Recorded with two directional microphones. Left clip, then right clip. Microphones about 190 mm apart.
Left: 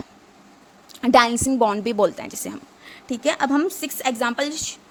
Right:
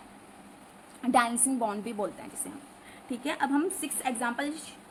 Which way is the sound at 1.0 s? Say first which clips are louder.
Left 10 dB; 50° left (ahead or behind).